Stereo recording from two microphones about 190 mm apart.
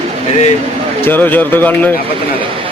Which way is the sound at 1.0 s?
10° left (ahead or behind).